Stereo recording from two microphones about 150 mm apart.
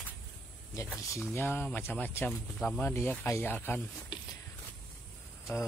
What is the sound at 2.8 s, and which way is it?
Speech, 15° left (ahead or behind).